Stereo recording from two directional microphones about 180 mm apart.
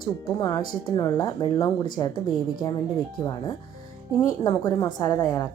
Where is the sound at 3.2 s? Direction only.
25° left (ahead or behind).